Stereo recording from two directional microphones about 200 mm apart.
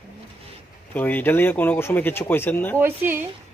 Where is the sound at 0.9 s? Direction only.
10° left (ahead or behind).